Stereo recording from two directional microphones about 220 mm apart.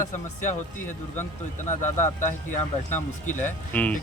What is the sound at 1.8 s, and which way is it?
Speech, 35° left (ahead or behind).